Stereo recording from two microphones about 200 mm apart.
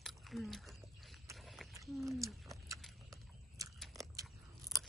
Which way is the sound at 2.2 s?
15° right (ahead or behind).